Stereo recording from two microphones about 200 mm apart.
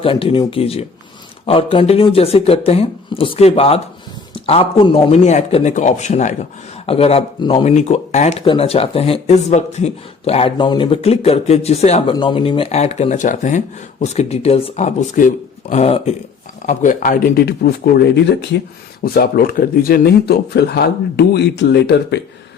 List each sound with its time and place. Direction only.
0.0 s speech: 30° left (ahead or behind); by 22.2 s 55° left (ahead or behind)